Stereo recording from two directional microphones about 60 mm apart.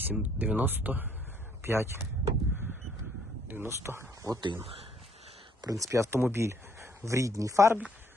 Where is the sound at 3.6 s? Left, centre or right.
Right.